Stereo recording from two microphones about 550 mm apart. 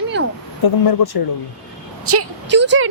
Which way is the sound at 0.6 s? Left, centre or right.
Left.